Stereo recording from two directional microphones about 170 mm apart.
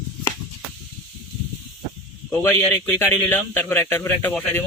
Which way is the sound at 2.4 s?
15° left (ahead or behind).